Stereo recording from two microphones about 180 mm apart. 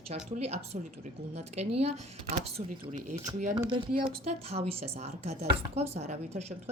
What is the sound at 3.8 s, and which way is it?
Speech, 30° right (ahead or behind).